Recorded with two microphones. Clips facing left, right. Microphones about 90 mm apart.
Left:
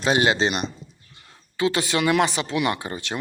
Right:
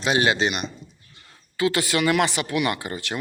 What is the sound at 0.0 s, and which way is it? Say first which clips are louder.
Speech: left 1 dB; 30° left (ahead or behind).